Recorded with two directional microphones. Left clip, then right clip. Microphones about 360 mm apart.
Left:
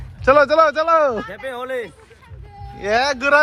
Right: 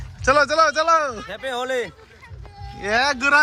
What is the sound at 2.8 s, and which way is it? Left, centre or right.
Speech, centre.